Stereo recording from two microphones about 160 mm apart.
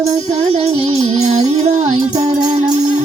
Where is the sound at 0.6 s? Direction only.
40° right (ahead or behind).